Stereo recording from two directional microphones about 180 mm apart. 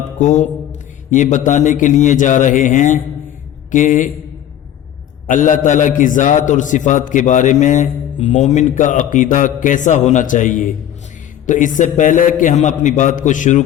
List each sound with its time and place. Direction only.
0.2 s a man's voice: 40° left (ahead or behind)
5.2 s a man's voice: 45° left (ahead or behind)